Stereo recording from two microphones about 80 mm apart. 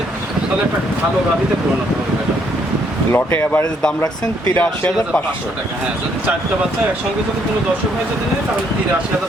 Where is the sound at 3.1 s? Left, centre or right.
Left.